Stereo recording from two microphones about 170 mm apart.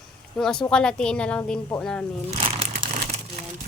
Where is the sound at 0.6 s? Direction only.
5° left (ahead or behind).